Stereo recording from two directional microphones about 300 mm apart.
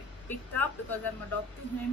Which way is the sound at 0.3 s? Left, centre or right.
Centre.